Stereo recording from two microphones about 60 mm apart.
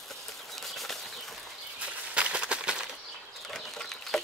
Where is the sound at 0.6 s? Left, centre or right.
Centre.